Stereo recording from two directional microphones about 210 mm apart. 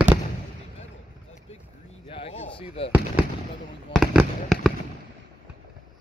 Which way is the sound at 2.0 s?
25° left (ahead or behind).